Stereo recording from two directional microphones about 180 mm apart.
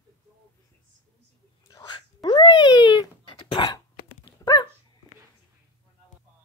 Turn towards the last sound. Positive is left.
turn(degrees=20)  # may be behind; listen again after turning